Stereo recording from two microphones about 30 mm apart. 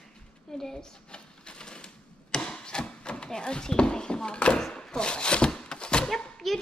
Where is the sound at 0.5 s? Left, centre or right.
Left.